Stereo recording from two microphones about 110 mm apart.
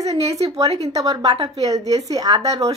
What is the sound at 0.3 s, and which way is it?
A woman's voice, 30° right (ahead or behind).